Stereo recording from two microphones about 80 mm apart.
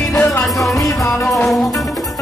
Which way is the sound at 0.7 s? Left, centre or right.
Left.